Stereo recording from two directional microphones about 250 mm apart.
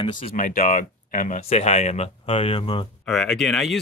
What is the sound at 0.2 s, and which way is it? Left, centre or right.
Speech, left.